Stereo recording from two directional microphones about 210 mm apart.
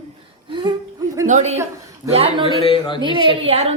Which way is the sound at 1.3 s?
35° right (ahead or behind).